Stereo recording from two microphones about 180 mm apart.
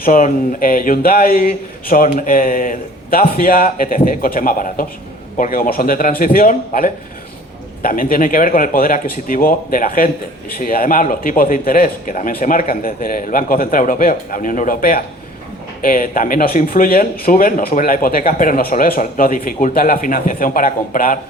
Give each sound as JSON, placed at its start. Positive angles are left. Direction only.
{"t": 0.0, "sound": "speech", "side_deg": 50}